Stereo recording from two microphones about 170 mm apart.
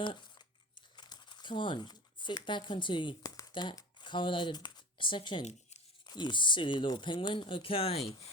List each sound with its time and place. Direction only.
0.0 s crumpling: 30° left (ahead or behind)
0.9 s speech: 25° left (ahead or behind)